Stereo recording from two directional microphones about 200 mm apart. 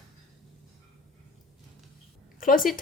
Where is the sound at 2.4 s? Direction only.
45° left (ahead or behind).